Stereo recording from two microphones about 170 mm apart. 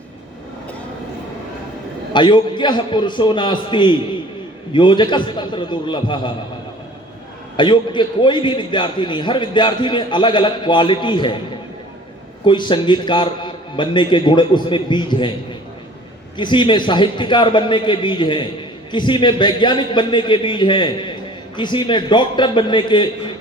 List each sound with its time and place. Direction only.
2.1 s a man's voice: 25° left (ahead or behind)
7.5 s a man's voice: 30° left (ahead or behind)
12.5 s a man's voice: 30° left (ahead or behind)
16.4 s a man's voice: 30° left (ahead or behind)